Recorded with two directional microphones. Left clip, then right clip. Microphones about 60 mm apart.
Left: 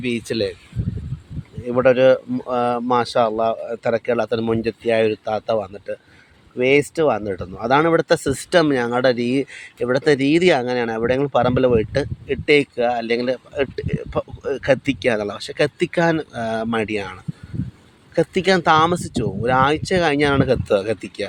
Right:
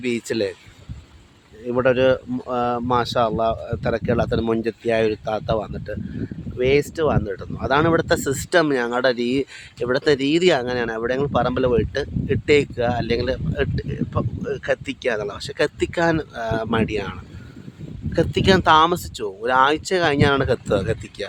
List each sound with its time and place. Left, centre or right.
0.0 s speech: right
1.6 s speech: centre
12.3 s speech: right
13.7 s speech: centre
14.1 s speech: centre